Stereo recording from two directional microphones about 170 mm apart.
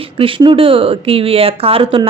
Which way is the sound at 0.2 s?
30° right (ahead or behind).